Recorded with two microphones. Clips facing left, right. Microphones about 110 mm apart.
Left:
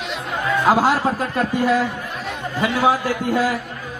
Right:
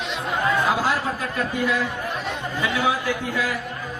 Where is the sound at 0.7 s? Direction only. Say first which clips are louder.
Left 6 dB; 30° left (ahead or behind).